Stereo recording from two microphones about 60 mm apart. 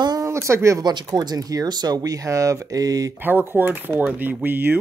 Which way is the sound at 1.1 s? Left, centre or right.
Right.